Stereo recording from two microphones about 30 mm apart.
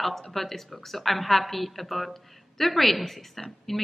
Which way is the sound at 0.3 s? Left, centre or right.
Centre.